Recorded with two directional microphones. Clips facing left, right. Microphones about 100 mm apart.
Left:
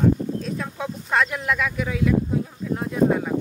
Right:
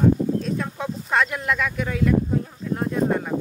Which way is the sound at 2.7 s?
Centre (ahead or behind).